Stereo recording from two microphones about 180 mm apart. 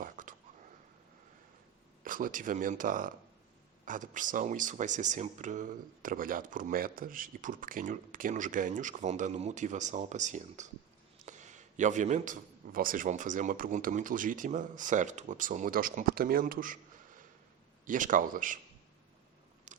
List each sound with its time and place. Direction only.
0.0 s whispering: 45° right (ahead or behind)
2.0 s a man's voice: 50° right (ahead or behind)
19.7 s a sound: 40° right (ahead or behind)